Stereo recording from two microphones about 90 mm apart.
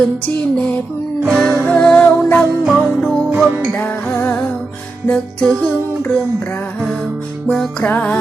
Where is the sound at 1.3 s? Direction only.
5° left (ahead or behind).